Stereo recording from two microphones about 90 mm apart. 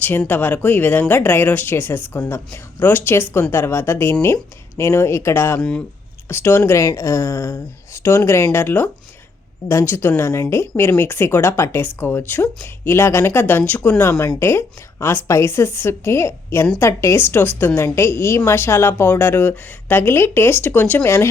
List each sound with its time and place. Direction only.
0.3 s speech: 20° left (ahead or behind)
5.5 s speech: 10° left (ahead or behind)
6.2 s speech: 25° left (ahead or behind)
6.7 s speech: 35° left (ahead or behind); by 13.9 s 20° left (ahead or behind)
14.0 s speech: 35° left (ahead or behind)